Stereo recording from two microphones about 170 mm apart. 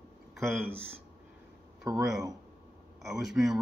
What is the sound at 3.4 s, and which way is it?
Speech, 10° right (ahead or behind).